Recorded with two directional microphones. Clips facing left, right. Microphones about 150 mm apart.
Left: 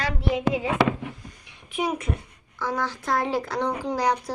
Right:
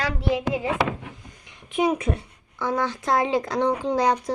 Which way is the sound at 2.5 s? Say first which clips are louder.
Right 3 dB; 20° right (ahead or behind).